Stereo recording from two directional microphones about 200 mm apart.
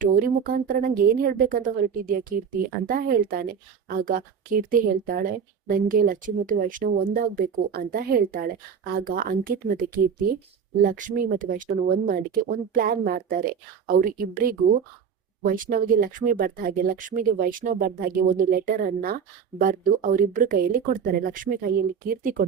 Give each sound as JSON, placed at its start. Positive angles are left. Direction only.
{"t": 0.0, "sound": "speech", "side_deg": -45}